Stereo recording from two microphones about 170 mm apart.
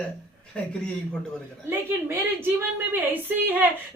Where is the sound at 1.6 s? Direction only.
15° right (ahead or behind).